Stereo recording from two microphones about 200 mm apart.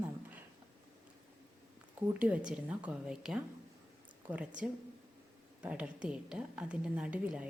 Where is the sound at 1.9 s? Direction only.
10° right (ahead or behind).